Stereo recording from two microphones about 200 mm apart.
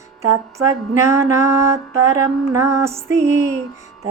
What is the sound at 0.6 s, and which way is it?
Mantra, 15° right (ahead or behind).